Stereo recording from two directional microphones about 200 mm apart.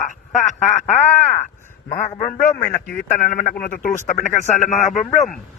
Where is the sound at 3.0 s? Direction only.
40° left (ahead or behind).